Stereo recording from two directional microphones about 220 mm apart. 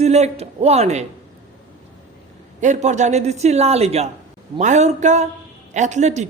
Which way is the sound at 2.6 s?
35° right (ahead or behind).